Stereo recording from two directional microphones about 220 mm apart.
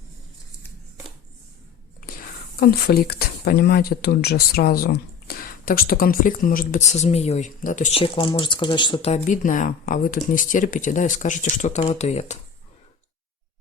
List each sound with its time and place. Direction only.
2.0 s speech: 40° left (ahead or behind)
8.0 s speech: 25° left (ahead or behind)